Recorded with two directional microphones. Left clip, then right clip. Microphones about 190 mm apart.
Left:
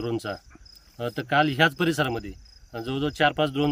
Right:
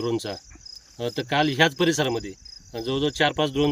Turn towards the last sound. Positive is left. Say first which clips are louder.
# even
turn(degrees=0)  # may be behind; listen again after turning